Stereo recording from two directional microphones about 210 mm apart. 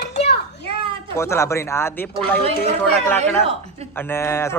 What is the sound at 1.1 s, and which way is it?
A man's voice, 10° left (ahead or behind).